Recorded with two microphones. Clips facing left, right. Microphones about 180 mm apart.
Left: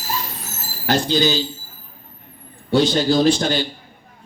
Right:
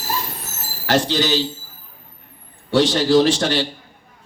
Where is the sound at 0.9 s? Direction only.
85° right.